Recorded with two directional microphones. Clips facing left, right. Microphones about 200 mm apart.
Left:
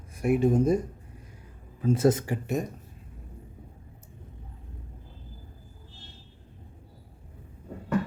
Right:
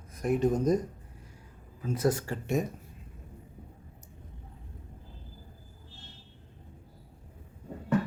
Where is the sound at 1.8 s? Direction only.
25° left (ahead or behind).